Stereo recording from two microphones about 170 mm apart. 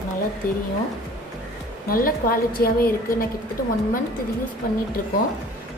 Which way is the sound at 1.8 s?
60° left (ahead or behind).